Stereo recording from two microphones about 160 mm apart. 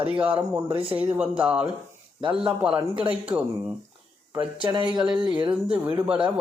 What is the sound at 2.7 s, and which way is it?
Speech, 30° right (ahead or behind).